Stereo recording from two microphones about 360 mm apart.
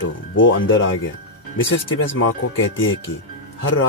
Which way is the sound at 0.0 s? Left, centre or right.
Left.